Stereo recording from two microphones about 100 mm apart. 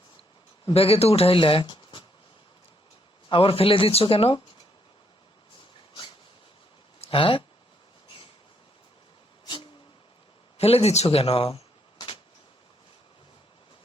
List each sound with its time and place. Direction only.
0.6 s speech: 75° left (ahead or behind); by 2.0 s 55° left (ahead or behind)
3.2 s speech: 65° left (ahead or behind)
7.0 s speech: 65° left (ahead or behind)
10.6 s speech: 90° left
11.9 s a sound: 60° left (ahead or behind)